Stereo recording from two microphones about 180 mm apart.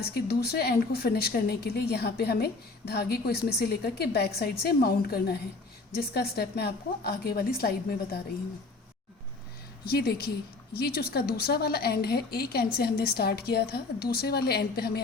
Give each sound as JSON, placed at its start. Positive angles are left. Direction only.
{"t": 0.1, "sound": "a woman's voice", "side_deg": 65}
{"t": 9.8, "sound": "a woman's voice", "side_deg": 60}